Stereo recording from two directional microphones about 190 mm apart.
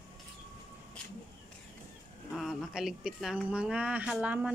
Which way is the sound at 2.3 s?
Centre (ahead or behind).